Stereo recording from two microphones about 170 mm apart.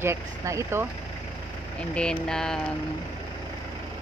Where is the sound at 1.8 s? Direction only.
5° left (ahead or behind).